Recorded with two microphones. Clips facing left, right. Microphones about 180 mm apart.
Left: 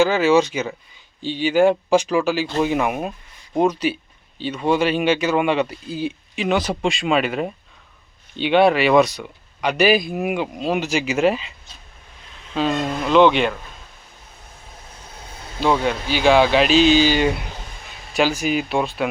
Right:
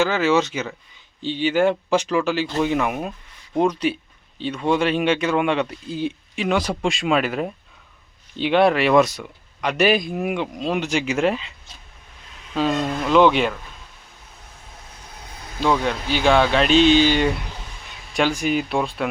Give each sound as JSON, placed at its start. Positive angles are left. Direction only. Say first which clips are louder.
{"t": 0.0, "sound": "speech", "louder": "left 3 dB", "side_deg": 15}
{"t": 12.6, "sound": "speech", "louder": "even", "side_deg": 0}
{"t": 15.6, "sound": "speech", "louder": "left 1 dB", "side_deg": 5}